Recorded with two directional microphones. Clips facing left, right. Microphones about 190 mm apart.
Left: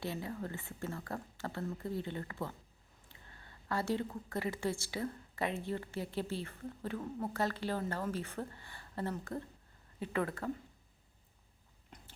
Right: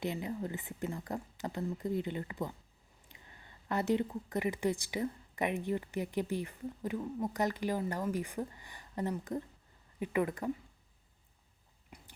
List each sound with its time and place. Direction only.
0.0 s a woman's voice: 20° right (ahead or behind)
11.9 s whispering: 10° right (ahead or behind)